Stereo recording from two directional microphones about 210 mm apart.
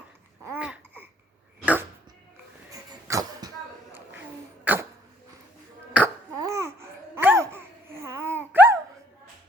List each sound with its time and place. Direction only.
0.4 s babbling: 5° right (ahead or behind)
2.6 s cough: 15° right (ahead or behind)
4.6 s cough: 10° right (ahead or behind)
5.9 s babbling: 10° right (ahead or behind)